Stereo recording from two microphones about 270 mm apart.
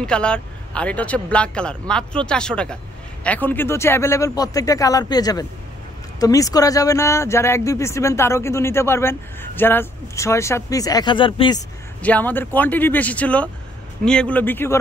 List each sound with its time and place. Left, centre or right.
0.0 s speech: centre
12.0 s speech: centre